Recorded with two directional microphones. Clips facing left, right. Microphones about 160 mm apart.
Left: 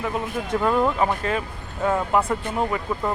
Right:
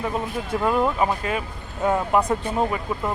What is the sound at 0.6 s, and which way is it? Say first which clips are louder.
Speech: even; 5° right (ahead or behind).